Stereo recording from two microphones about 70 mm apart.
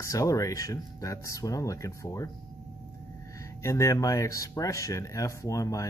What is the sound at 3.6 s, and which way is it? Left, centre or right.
Speech, left.